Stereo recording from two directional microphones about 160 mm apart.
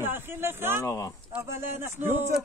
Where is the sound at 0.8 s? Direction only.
20° left (ahead or behind).